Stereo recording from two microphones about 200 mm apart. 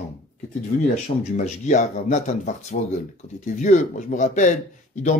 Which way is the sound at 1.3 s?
35° left (ahead or behind).